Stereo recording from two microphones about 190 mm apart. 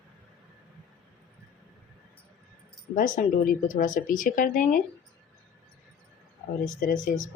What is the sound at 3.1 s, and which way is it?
Speech, 45° left (ahead or behind).